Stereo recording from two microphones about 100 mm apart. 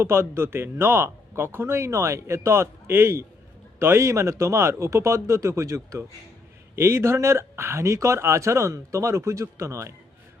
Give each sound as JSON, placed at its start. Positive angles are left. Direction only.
{"t": 0.0, "sound": "a man's voice", "side_deg": -25}